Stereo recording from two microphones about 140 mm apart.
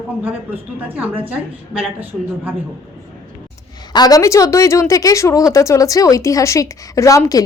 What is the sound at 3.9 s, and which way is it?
Speech, 30° left (ahead or behind).